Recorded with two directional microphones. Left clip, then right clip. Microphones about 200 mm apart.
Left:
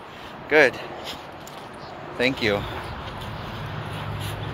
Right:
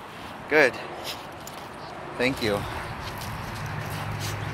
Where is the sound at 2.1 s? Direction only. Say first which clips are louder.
Left 3 dB; 10° left (ahead or behind).